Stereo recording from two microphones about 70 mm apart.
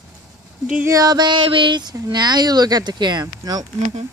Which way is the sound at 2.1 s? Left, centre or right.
Right.